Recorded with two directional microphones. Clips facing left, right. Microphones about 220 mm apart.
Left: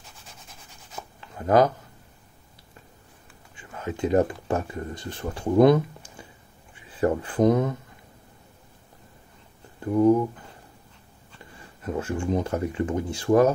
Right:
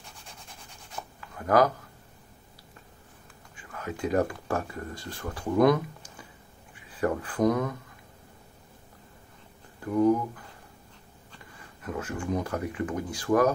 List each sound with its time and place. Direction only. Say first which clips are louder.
1.2 s a sound: left 3 dB; 25° left (ahead or behind)
3.5 s speech: left 4 dB; 25° left (ahead or behind)
7.0 s speech: left 4 dB; 25° left (ahead or behind)
9.8 s speech: left 4 dB; 25° left (ahead or behind)
11.8 s speech: left 5 dB; 25° left (ahead or behind)